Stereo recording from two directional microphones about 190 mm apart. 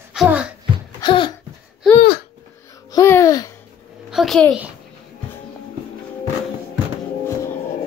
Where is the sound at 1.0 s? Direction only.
25° left (ahead or behind).